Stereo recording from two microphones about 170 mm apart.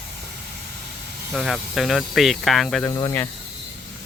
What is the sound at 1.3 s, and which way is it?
Speech, centre (ahead or behind).